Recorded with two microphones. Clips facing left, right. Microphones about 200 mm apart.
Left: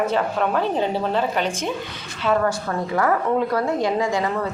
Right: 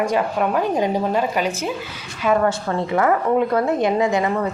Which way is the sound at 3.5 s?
20° right (ahead or behind).